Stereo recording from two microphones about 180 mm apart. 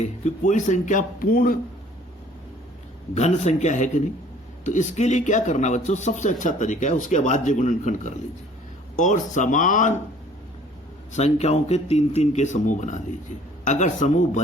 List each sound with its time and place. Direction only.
0.0 s speech: 40° left (ahead or behind)
3.2 s speech: 40° left (ahead or behind)
11.1 s speech: 35° left (ahead or behind)